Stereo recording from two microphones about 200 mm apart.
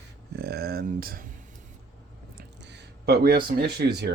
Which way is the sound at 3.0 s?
50° right (ahead or behind).